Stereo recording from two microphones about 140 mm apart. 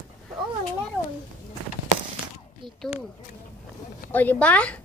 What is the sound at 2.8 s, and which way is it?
Speech, centre (ahead or behind).